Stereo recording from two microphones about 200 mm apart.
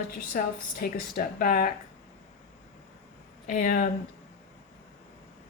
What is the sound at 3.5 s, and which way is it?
Speech, 45° left (ahead or behind).